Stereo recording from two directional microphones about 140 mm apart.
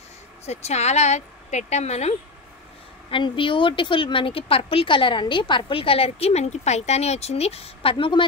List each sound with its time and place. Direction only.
0.5 s speech: 50° left (ahead or behind)
3.1 s speech: 35° left (ahead or behind)